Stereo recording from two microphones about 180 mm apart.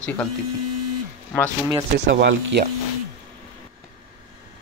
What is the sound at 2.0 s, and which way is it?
Speech, 80° right.